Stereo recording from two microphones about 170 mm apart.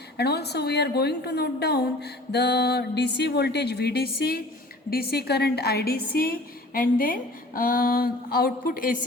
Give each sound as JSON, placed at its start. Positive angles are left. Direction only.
{"t": 0.2, "sound": "a woman's voice", "side_deg": 75}